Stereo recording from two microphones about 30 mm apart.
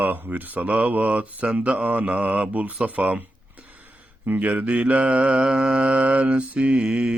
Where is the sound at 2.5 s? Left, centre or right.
Right.